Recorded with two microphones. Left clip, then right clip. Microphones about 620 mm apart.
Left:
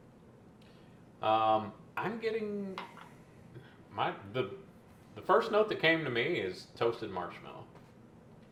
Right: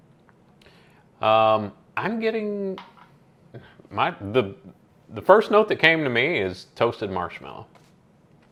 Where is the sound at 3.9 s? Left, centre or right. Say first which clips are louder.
Right 11 dB; right.